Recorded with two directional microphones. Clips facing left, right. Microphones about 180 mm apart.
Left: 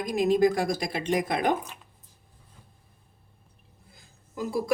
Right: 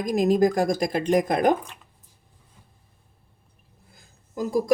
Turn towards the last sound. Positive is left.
turn(degrees=-40)  # may be behind; listen again after turning